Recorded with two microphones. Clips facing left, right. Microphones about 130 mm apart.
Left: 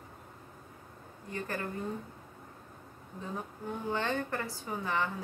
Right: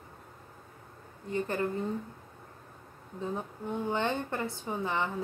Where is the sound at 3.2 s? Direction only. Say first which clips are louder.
Right 4 dB; 20° right (ahead or behind).